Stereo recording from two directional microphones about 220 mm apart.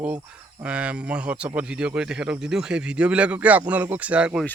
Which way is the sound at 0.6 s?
5° right (ahead or behind).